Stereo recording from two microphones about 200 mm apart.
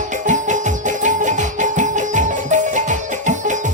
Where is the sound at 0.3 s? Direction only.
40° right (ahead or behind).